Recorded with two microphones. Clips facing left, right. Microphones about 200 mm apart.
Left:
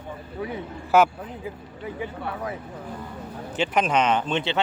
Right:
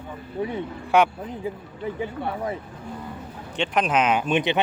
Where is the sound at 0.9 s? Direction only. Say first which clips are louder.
Left 1 dB; centre (ahead or behind).